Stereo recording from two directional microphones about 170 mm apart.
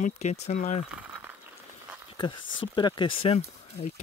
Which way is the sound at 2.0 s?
25° left (ahead or behind).